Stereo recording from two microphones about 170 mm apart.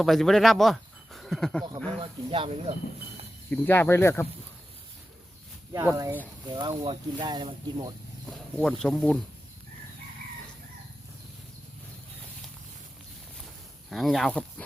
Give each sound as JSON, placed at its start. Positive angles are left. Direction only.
{"t": 0.0, "sound": "speech", "side_deg": 0}
{"t": 2.0, "sound": "speech", "side_deg": -30}
{"t": 3.5, "sound": "speech", "side_deg": 15}
{"t": 5.7, "sound": "speech", "side_deg": -20}
{"t": 8.3, "sound": "speech", "side_deg": 5}
{"t": 13.9, "sound": "speech", "side_deg": 0}